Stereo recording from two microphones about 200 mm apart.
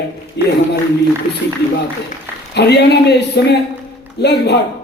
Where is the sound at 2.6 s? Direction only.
55° left (ahead or behind).